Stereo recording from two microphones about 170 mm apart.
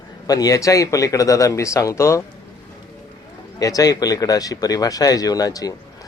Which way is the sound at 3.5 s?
20° left (ahead or behind).